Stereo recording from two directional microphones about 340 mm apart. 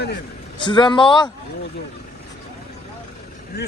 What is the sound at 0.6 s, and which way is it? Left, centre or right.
Speech, centre.